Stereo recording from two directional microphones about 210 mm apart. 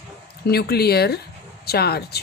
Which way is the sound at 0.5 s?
50° left (ahead or behind).